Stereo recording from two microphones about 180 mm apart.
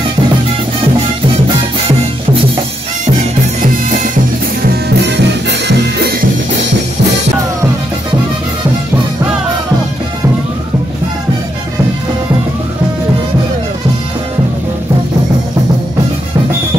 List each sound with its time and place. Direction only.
4.8 s music: 70° right (ahead or behind)